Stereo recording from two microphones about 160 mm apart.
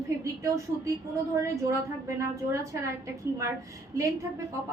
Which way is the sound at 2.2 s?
20° right (ahead or behind).